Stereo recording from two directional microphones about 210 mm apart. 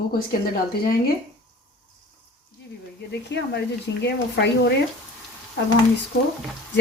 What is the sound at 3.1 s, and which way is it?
Speech, 55° left (ahead or behind).